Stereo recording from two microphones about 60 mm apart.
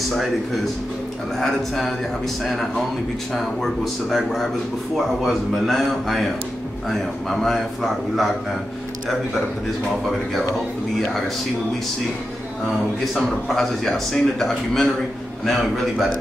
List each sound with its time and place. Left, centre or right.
1.4 s speech: centre
12.6 s speech: centre